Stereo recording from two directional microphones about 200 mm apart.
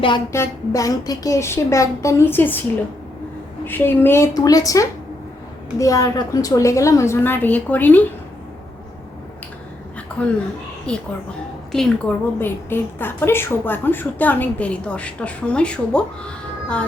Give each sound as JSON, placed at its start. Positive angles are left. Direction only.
{"t": 0.3, "sound": "a woman's voice", "side_deg": 15}
{"t": 3.7, "sound": "a woman's voice", "side_deg": 10}
{"t": 10.1, "sound": "a sound", "side_deg": 5}
{"t": 10.9, "sound": "a woman's voice", "side_deg": 5}